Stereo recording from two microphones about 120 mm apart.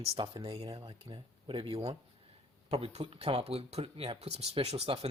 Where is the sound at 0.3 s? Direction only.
45° right (ahead or behind).